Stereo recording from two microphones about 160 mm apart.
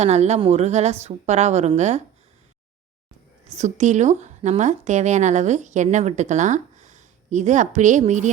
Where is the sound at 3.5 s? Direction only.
45° right (ahead or behind).